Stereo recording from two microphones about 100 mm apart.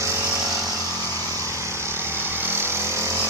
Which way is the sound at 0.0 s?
30° right (ahead or behind).